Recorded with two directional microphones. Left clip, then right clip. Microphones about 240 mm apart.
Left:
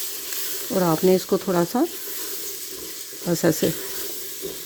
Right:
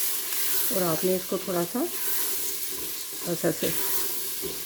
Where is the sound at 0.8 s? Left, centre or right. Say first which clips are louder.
Left 8 dB; left.